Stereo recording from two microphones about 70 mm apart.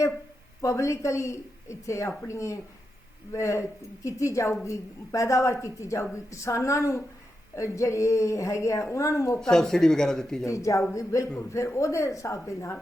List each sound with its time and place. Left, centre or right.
0.6 s a woman's voice: left
9.4 s speech: centre
10.4 s a woman's voice: left